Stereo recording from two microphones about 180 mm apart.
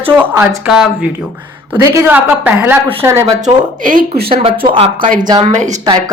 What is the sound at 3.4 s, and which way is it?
Speech, 45° right (ahead or behind).